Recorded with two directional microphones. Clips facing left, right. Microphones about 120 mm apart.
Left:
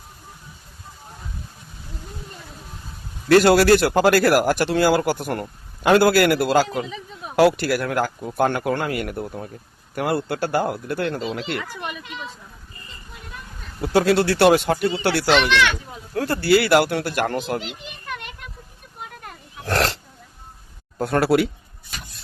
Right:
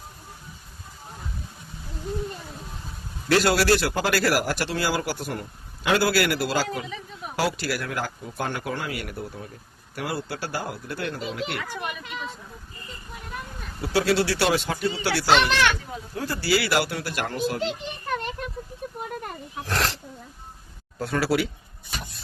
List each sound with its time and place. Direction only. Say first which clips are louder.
3.2 s a man's voice: left 7 dB; 55° left (ahead or behind)
13.8 s speech: left 5 dB; 50° left (ahead or behind)
15.4 s a child's voice: left 3 dB; 45° right (ahead or behind)
16.1 s speech: left 7 dB; 60° left (ahead or behind)
19.6 s roaring cats: left 6 dB; 65° left (ahead or behind)
21.0 s speech: left 6 dB; 55° left (ahead or behind)